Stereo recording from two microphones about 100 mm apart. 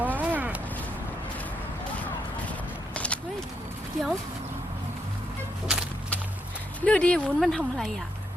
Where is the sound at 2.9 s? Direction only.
15° left (ahead or behind).